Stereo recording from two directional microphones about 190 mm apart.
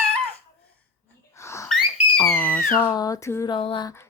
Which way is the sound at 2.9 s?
20° left (ahead or behind).